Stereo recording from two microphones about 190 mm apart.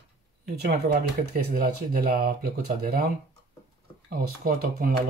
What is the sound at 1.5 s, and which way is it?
Speech, 50° right (ahead or behind).